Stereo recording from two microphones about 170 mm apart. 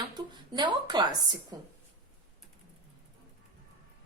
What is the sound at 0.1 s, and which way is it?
A woman's voice, 25° right (ahead or behind).